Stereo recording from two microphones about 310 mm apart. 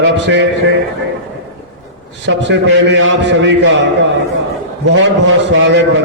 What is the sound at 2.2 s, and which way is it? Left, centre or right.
A man's voice, right.